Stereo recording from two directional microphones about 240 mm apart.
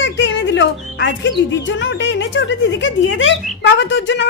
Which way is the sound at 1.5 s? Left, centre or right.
Left.